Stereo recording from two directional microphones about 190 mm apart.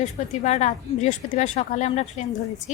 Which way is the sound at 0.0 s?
35° left (ahead or behind).